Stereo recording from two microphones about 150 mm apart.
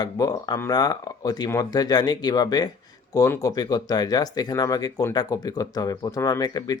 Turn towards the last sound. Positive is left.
turn(degrees=25)  # may be behind; listen again after turning